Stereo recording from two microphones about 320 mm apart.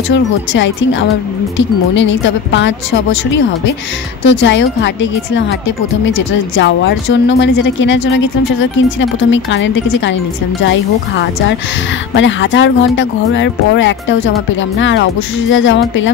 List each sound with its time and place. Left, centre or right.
0.1 s speech: left
4.2 s speech: left